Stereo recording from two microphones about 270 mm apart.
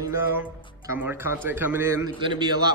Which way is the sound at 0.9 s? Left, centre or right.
Centre.